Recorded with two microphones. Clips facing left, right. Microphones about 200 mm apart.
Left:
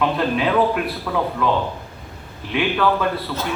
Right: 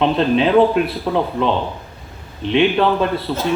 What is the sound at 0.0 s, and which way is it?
A man's voice, 25° right (ahead or behind).